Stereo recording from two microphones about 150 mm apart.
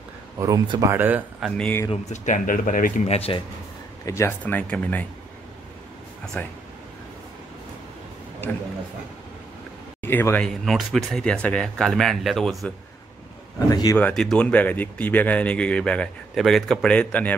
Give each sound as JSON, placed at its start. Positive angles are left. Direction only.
{"t": 0.4, "sound": "speech", "side_deg": -25}
{"t": 1.6, "sound": "speech", "side_deg": 10}
{"t": 1.9, "sound": "speech", "side_deg": 50}
{"t": 3.2, "sound": "speech", "side_deg": 40}
{"t": 4.0, "sound": "speech", "side_deg": 20}
{"t": 6.4, "sound": "speech", "side_deg": 10}
{"t": 10.0, "sound": "speech", "side_deg": 15}
{"t": 13.7, "sound": "speech", "side_deg": 25}
{"t": 13.9, "sound": "speech", "side_deg": 5}